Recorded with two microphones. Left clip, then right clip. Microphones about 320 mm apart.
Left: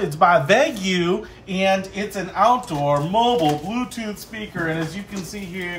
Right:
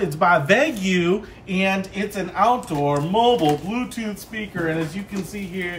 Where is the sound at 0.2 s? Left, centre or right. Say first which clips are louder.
Left 2 dB; centre.